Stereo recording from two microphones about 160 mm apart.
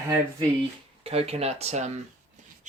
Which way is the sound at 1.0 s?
40° right (ahead or behind).